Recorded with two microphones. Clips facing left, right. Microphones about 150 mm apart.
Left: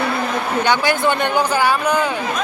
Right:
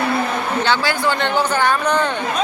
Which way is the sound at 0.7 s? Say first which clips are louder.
Left 3 dB; 15° left (ahead or behind).